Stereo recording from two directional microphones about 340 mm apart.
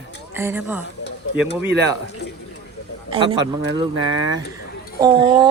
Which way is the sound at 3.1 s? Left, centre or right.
Centre.